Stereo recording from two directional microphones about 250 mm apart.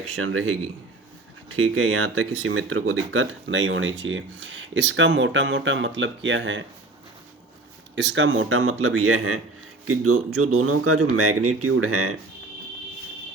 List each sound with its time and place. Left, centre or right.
0.2 s speech: right
7.9 s speech: right